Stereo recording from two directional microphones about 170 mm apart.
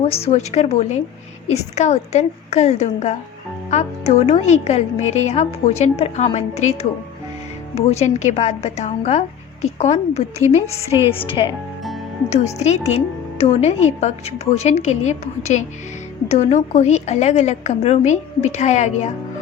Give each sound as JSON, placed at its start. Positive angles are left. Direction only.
{"t": 0.0, "sound": "speech", "side_deg": 35}
{"t": 7.8, "sound": "speech", "side_deg": 40}
{"t": 12.5, "sound": "speech", "side_deg": 40}